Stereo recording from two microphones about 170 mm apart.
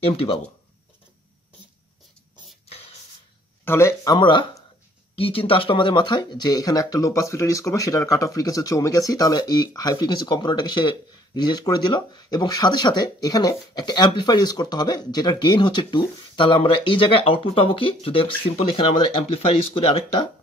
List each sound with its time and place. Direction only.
0.0 s speech: 35° left (ahead or behind)
3.6 s speech: 15° left (ahead or behind); by 20.0 s 30° left (ahead or behind)